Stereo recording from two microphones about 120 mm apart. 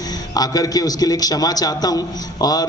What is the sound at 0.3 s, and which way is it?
A man's voice, 30° left (ahead or behind).